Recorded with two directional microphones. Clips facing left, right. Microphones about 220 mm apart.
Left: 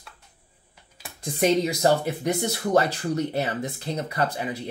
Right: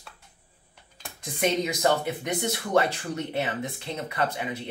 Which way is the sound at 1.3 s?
35° left (ahead or behind).